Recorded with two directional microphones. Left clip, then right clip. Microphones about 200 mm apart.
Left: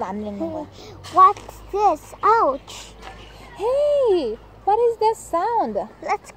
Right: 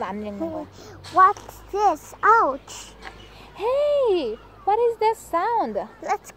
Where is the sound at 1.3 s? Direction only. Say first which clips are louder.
Left 2 dB; 15° right (ahead or behind).